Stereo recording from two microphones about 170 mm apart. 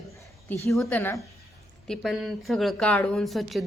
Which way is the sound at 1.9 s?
Centre (ahead or behind).